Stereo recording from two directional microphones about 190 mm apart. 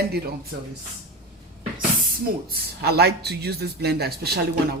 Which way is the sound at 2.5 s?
55° right (ahead or behind).